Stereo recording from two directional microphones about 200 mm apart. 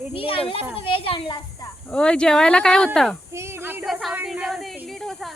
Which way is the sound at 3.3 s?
15° right (ahead or behind).